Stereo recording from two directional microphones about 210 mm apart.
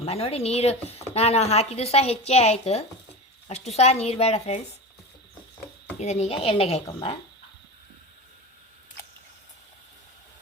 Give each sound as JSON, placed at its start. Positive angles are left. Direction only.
{"t": 0.0, "sound": "speech", "side_deg": 30}
{"t": 6.0, "sound": "speech", "side_deg": 30}